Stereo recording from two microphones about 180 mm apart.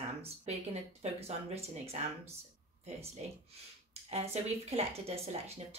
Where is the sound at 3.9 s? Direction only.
35° right (ahead or behind).